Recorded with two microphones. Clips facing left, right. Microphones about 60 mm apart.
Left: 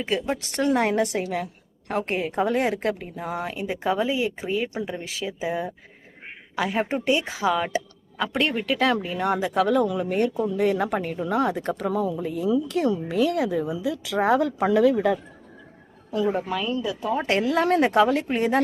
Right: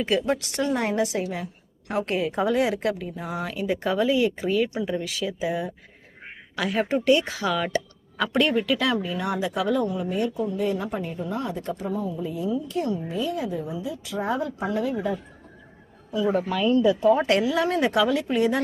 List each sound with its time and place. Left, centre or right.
0.0 s speech: centre
0.5 s a woman's voice: left
3.4 s speech: left
8.6 s a woman's voice: left
9.8 s speech: left
12.1 s speech: left
16.2 s speech: centre
16.8 s speech: centre
17.4 s a woman's voice: left